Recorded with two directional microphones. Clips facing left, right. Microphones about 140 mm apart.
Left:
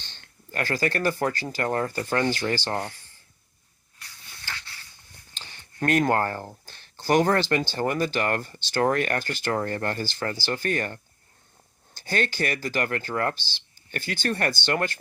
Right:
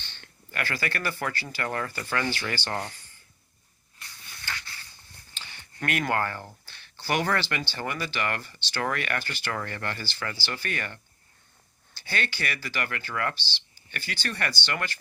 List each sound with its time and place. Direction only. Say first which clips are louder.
0.0 s speech: even; 40° left (ahead or behind)
5.3 s a sound: even; 40° left (ahead or behind)
6.7 s speech: left 6 dB; 40° left (ahead or behind)